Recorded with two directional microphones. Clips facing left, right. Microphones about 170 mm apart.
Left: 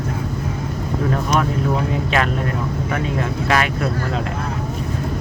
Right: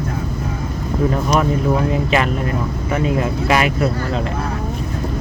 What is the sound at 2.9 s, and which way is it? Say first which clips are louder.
Speech: right 6 dB; 5° right (ahead or behind).